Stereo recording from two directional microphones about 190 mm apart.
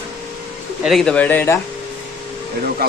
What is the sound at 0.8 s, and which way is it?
Speech, centre (ahead or behind).